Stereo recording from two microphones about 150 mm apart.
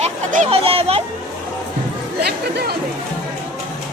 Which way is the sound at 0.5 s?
40° right (ahead or behind).